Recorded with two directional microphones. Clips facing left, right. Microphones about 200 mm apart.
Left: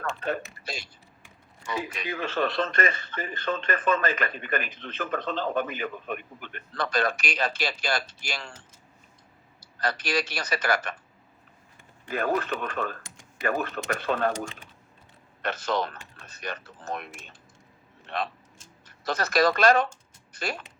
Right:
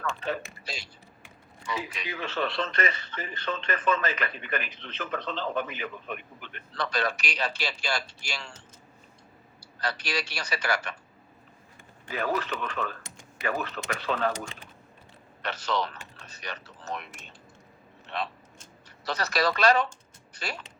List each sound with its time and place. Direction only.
0.0 s a sound: 50° left (ahead or behind)
1.6 s speech: 50° left (ahead or behind)
9.8 s speech: 50° left (ahead or behind)
12.1 s speech: 50° left (ahead or behind)
15.4 s speech: 50° left (ahead or behind)